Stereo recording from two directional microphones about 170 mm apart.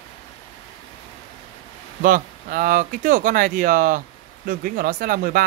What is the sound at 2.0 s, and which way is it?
Speech, 55° right (ahead or behind).